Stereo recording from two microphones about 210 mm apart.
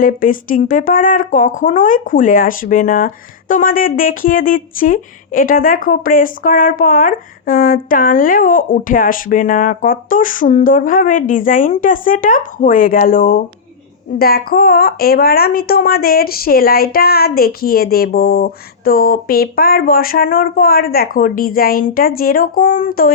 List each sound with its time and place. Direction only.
0.0 s speech: 40° left (ahead or behind)